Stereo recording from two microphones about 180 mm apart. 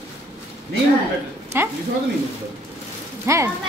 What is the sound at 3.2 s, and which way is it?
Speech, 15° right (ahead or behind).